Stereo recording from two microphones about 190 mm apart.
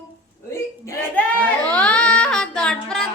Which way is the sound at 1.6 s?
5° left (ahead or behind).